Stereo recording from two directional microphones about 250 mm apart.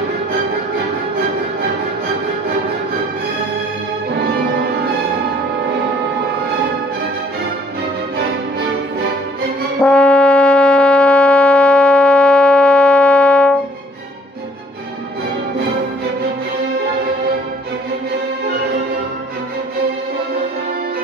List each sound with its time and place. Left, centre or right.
9.8 s music: centre